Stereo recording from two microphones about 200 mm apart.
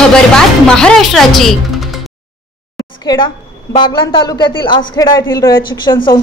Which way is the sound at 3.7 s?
25° left (ahead or behind).